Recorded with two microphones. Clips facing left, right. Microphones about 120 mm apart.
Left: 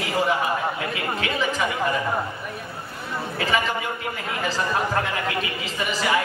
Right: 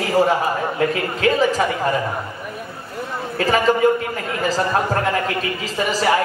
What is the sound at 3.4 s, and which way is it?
Speech, 40° right (ahead or behind).